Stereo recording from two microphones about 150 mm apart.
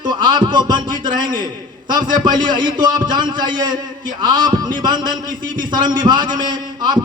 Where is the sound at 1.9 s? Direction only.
30° right (ahead or behind).